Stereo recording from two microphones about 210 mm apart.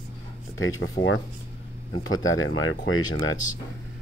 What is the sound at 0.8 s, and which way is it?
Speech, 65° left (ahead or behind).